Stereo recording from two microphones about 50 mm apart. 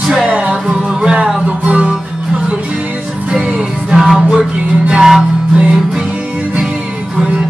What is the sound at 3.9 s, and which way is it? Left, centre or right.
Music, centre.